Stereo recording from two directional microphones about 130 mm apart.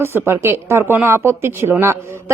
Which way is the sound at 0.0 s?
15° right (ahead or behind).